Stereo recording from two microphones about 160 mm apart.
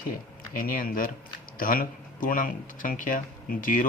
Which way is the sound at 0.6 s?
60° left (ahead or behind).